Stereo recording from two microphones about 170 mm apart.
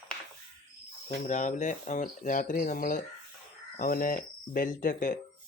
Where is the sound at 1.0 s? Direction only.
45° left (ahead or behind).